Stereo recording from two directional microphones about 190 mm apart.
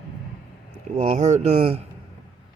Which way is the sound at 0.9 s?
30° right (ahead or behind).